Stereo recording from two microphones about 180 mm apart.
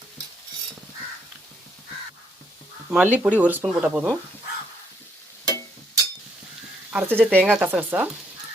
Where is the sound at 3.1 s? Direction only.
10° right (ahead or behind).